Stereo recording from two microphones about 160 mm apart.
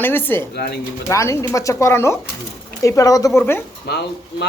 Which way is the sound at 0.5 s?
90° left.